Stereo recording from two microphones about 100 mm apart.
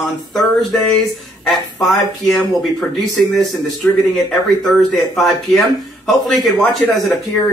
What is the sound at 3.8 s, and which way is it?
Speech, 15° left (ahead or behind).